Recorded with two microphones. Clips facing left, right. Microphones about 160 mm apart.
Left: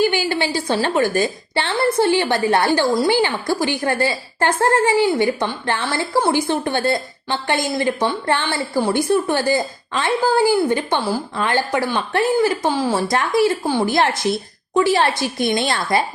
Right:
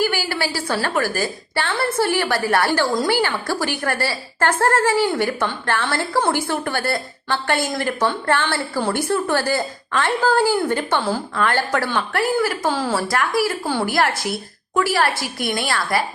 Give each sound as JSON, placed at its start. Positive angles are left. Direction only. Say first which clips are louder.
{"t": 0.0, "sound": "a woman's voice", "louder": "left 3 dB", "side_deg": 20}